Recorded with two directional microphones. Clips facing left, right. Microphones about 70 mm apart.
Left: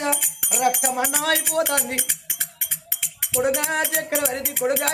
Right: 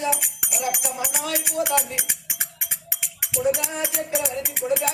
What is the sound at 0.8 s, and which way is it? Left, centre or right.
Speech, left.